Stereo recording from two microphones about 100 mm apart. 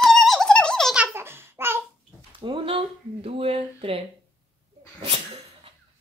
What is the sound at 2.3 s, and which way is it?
Speech, 60° right (ahead or behind).